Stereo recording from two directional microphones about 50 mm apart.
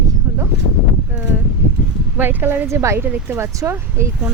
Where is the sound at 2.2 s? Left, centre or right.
Right.